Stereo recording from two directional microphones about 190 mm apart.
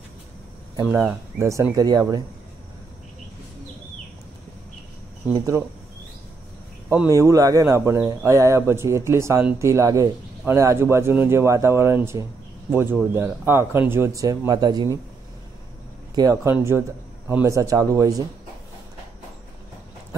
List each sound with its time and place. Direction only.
0.8 s speech: 10° right (ahead or behind)
6.9 s speech: 15° right (ahead or behind)
16.2 s speech: 15° right (ahead or behind)